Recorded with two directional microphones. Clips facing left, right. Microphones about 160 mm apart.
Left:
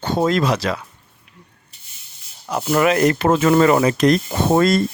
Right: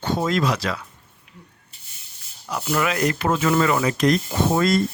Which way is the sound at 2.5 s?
40° left (ahead or behind).